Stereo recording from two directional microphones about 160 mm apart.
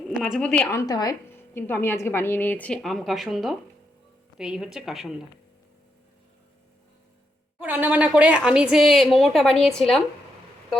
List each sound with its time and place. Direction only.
0.2 s a woman's voice: 5° left (ahead or behind)
0.7 s a woman's voice: 20° left (ahead or behind); by 5.1 s centre (ahead or behind)
7.6 s a woman's voice: 10° right (ahead or behind)